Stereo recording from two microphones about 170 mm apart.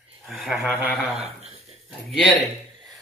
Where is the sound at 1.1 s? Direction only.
40° right (ahead or behind).